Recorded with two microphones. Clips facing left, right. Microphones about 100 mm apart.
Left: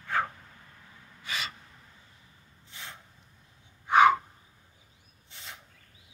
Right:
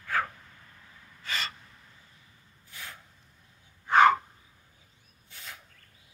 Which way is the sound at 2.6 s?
25° left (ahead or behind).